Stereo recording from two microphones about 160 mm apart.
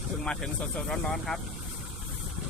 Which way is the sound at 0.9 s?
5° left (ahead or behind).